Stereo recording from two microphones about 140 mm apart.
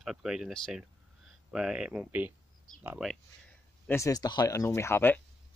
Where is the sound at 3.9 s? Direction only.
25° left (ahead or behind).